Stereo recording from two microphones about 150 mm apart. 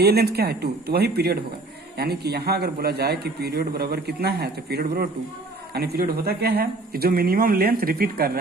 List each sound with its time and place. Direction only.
0.0 s a man's voice: 90° right